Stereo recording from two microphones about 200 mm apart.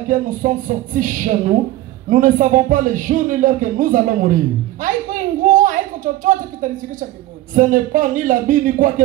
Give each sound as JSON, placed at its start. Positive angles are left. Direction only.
{"t": 0.1, "sound": "speech", "side_deg": -40}
{"t": 4.7, "sound": "a sound", "side_deg": -40}
{"t": 6.2, "sound": "speech", "side_deg": -40}